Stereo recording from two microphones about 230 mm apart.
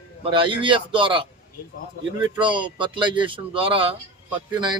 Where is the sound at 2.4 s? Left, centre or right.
Right.